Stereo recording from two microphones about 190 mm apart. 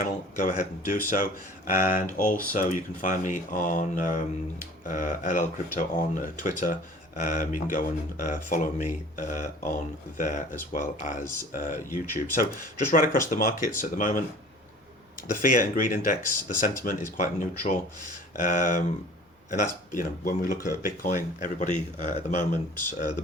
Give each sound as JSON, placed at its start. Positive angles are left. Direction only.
{"t": 0.0, "sound": "speech", "side_deg": 45}
{"t": 15.3, "sound": "speech", "side_deg": 45}